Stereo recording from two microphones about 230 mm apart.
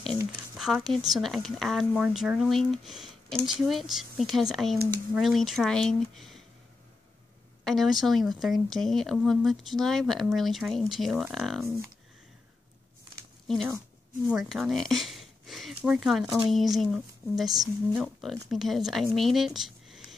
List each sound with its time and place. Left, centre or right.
0.6 s a woman's voice: centre
7.6 s a woman's voice: centre
14.3 s a woman's voice: centre